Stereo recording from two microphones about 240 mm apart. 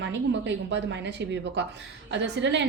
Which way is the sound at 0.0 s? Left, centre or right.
Right.